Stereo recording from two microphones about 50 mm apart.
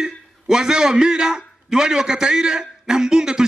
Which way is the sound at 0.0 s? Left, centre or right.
Centre.